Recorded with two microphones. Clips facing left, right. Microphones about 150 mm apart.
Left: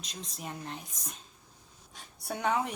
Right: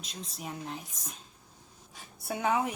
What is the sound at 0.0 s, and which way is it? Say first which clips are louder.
A woman's voice: right 1 dB; centre (ahead or behind).